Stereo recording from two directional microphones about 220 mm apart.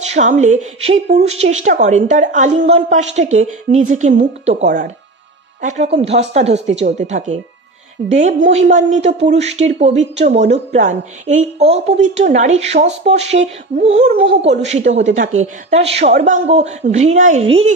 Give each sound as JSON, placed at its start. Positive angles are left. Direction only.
{"t": 0.0, "sound": "speech", "side_deg": -30}